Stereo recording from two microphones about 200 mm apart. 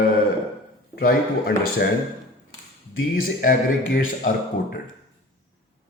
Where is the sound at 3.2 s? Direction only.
45° left (ahead or behind).